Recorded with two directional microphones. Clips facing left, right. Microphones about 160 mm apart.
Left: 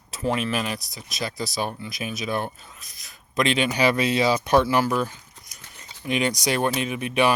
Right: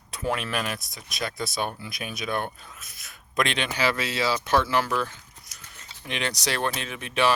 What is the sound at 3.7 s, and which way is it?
Speech, 15° left (ahead or behind).